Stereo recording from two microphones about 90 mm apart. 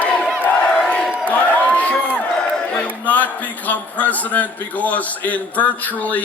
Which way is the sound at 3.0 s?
20° left (ahead or behind).